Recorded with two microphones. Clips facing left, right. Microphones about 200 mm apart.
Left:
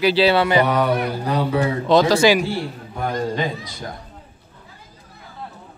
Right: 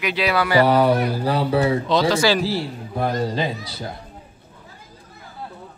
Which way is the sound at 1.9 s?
50° left (ahead or behind).